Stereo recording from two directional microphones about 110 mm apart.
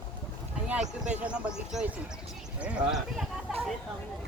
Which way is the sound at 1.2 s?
10° right (ahead or behind).